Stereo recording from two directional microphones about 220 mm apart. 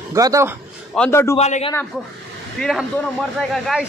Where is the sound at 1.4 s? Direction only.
30° left (ahead or behind).